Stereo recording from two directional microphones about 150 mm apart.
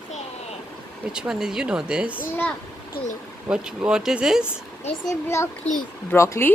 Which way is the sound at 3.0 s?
90° left.